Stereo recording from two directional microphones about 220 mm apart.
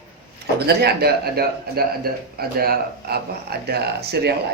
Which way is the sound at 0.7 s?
45° right (ahead or behind).